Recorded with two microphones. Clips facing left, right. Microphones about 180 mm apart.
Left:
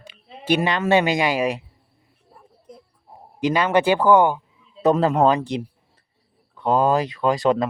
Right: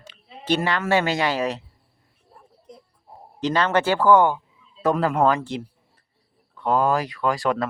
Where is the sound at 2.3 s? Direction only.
Centre (ahead or behind).